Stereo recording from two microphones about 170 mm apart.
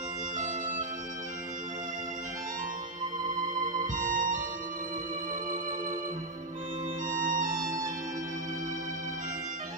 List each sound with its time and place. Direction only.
0.4 s bagpipes: 50° right (ahead or behind)
3.8 s music: 50° right (ahead or behind)
7.1 s music: 50° right (ahead or behind)